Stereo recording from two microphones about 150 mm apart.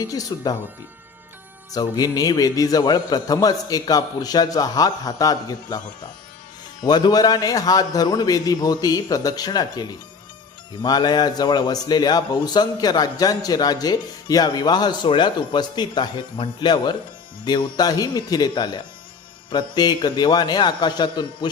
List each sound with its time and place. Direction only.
0.0 s a man's voice: 25° left (ahead or behind)
1.7 s a man's voice: 25° left (ahead or behind)
6.8 s a man's voice: 25° left (ahead or behind)